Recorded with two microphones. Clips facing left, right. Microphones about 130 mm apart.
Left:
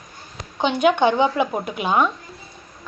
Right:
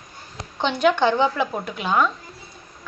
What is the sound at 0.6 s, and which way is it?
A woman's voice, 15° left (ahead or behind).